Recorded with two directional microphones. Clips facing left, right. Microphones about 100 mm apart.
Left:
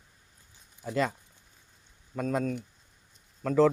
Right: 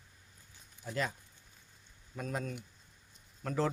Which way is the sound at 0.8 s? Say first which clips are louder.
Left 8 dB; 65° left (ahead or behind).